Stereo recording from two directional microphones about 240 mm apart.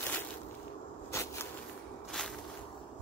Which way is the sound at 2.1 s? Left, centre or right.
Centre.